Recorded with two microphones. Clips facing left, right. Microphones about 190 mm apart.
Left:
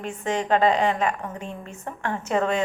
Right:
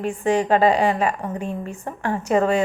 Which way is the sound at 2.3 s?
10° right (ahead or behind).